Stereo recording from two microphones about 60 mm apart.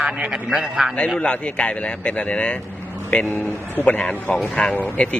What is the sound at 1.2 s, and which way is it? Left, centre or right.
Speech, centre.